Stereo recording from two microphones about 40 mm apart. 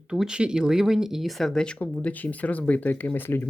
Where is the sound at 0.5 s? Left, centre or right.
Centre.